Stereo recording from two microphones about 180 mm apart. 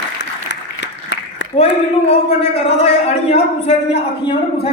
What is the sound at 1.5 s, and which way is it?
A man's voice, 35° left (ahead or behind).